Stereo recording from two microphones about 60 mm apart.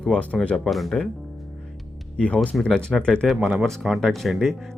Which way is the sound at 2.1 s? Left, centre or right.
Left.